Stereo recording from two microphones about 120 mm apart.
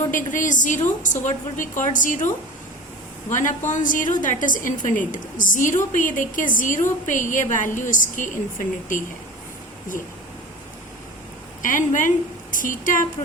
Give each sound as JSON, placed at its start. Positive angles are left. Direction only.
{"t": 0.1, "sound": "a woman's voice", "side_deg": 90}
{"t": 11.6, "sound": "a woman's voice", "side_deg": 90}